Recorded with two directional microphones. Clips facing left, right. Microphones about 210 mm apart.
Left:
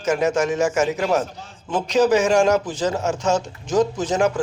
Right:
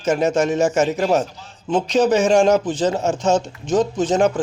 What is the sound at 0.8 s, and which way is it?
A man's voice, 25° right (ahead or behind).